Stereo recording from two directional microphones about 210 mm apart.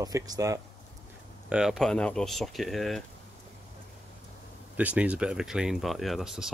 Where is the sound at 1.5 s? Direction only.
5° right (ahead or behind).